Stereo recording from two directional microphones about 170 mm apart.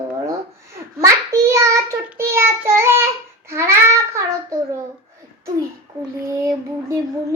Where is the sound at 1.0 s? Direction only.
20° right (ahead or behind).